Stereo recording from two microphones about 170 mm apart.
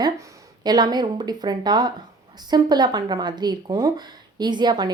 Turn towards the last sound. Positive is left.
turn(degrees=-25)  # may be behind; listen again after turning